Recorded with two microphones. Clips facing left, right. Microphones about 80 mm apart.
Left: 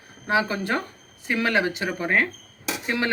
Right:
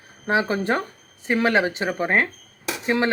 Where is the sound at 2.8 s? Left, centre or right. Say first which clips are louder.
Right 5 dB; right.